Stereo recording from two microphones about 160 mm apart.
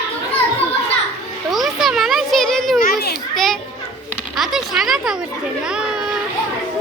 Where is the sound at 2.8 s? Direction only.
75° left (ahead or behind).